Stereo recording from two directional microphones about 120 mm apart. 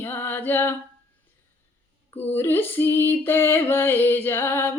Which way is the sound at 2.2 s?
20° left (ahead or behind).